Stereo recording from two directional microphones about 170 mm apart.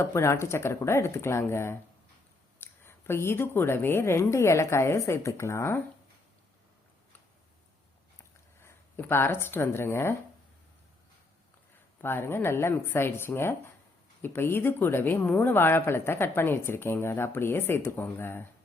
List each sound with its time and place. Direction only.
0.0 s speech: 15° left (ahead or behind)
8.6 s speech: 15° left (ahead or behind)
11.9 s speech: 10° left (ahead or behind)